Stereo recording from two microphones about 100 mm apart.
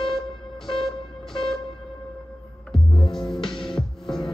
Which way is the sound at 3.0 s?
55° left (ahead or behind).